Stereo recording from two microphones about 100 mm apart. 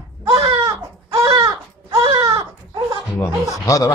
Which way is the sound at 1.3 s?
50° right (ahead or behind).